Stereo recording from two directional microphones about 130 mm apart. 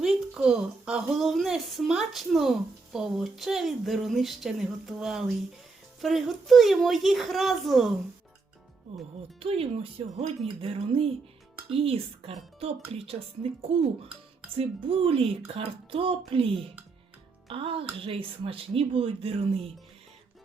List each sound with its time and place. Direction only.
0.0 s speech: centre (ahead or behind)
9.4 s speech: 50° right (ahead or behind)